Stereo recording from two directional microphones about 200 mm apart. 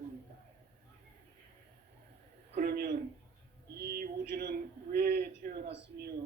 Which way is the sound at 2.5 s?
50° right (ahead or behind).